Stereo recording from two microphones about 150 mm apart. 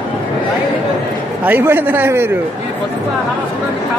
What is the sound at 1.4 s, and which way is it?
Speech, 15° right (ahead or behind).